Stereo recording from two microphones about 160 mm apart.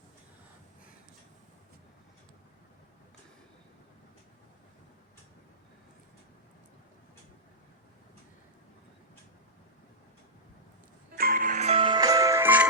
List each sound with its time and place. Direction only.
11.2 s music: 60° right (ahead or behind); by 12.6 s 10° right (ahead or behind)